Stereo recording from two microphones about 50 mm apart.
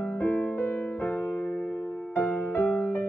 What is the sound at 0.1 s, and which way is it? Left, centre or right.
Music, left.